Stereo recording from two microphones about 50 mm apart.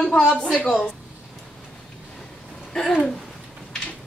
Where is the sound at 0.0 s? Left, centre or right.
Centre.